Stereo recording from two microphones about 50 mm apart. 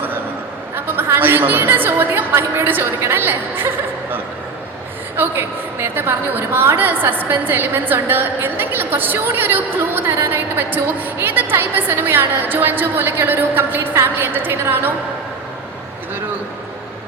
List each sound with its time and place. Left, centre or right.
0.9 s a woman's voice: right
5.1 s a woman's voice: right